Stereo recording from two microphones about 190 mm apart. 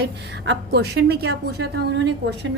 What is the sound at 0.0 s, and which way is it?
A woman's voice, 60° right (ahead or behind).